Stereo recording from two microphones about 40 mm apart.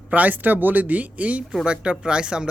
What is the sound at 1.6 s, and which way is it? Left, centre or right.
Speech, right.